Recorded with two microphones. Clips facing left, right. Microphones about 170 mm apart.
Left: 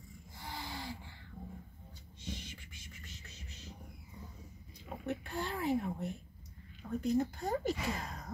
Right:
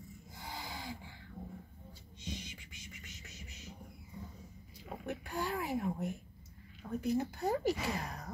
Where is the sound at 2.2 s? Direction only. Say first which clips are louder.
Even; 15° right (ahead or behind).